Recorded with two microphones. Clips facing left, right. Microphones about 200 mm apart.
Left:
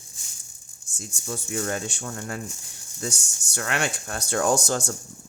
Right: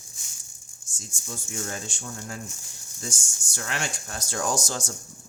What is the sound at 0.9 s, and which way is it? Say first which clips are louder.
Speech: left 6 dB; 65° left (ahead or behind).